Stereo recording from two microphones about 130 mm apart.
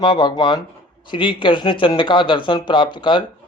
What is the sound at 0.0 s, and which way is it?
Speech, 35° left (ahead or behind).